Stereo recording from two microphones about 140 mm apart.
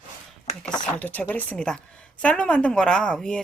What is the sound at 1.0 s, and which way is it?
Speech, 10° left (ahead or behind).